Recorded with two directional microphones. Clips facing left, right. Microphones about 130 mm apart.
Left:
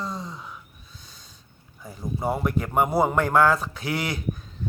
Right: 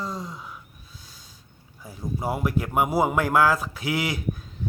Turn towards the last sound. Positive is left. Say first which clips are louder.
# right 1 dB
turn(degrees=-5)  # may be behind; listen again after turning